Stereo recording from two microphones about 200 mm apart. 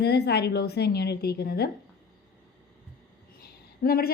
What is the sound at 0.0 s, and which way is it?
A woman's voice, 55° left (ahead or behind).